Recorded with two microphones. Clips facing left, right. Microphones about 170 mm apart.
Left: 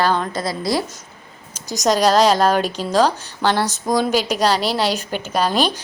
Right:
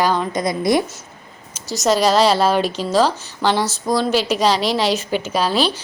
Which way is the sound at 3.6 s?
15° left (ahead or behind).